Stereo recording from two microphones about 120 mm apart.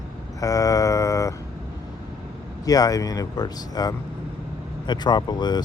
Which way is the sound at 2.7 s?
30° left (ahead or behind).